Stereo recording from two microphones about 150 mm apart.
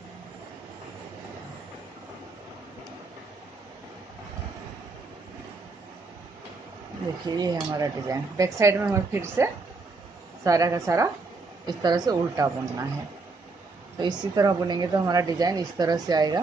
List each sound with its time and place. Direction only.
7.3 s a woman's voice: 25° right (ahead or behind)
13.9 s a woman's voice: 25° right (ahead or behind)